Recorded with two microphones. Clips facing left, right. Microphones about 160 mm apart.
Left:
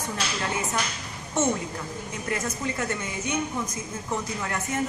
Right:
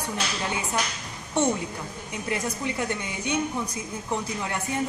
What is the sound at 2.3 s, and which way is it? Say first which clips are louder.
A woman's voice: right 1 dB; 15° right (ahead or behind).